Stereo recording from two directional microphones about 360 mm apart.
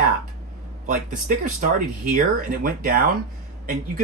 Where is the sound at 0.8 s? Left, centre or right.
Right.